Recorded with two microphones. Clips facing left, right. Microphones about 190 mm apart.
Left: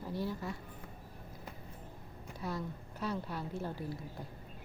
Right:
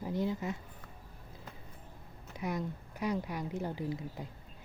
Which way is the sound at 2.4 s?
15° right (ahead or behind).